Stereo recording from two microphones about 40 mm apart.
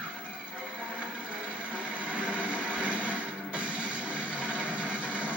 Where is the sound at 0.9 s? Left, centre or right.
Right.